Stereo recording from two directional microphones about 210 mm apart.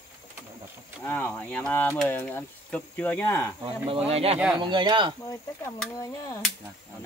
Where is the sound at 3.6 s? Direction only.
25° right (ahead or behind).